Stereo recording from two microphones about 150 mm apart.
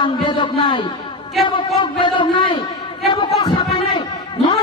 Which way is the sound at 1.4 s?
35° left (ahead or behind).